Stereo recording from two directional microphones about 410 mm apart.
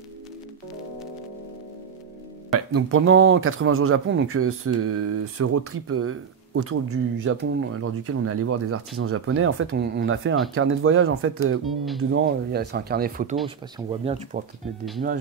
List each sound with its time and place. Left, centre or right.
2.7 s speech: right
11.6 s speech: centre
12.0 s speech: right